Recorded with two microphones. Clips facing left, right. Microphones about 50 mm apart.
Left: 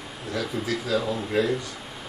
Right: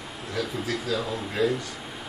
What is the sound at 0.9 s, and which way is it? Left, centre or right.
Speech, centre.